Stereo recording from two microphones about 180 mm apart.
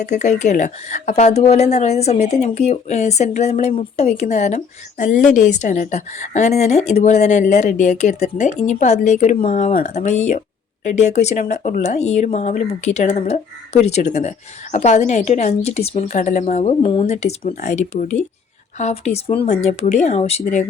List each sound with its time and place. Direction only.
0.0 s speech: 40° left (ahead or behind)